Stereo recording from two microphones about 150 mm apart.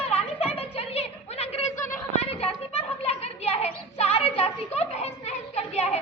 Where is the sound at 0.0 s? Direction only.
40° left (ahead or behind).